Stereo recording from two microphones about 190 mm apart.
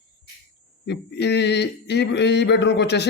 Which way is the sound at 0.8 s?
60° left (ahead or behind).